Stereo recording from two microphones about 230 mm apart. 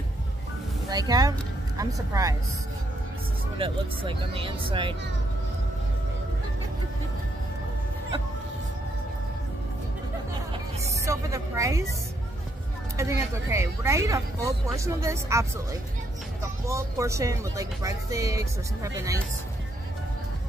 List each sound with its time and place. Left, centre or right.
0.8 s speech: centre
3.5 s speech: right
11.1 s speech: centre
12.9 s speech: centre